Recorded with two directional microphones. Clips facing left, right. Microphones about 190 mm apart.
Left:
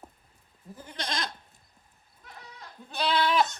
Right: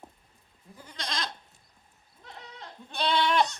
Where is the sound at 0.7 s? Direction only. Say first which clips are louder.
Left 2 dB; 25° left (ahead or behind).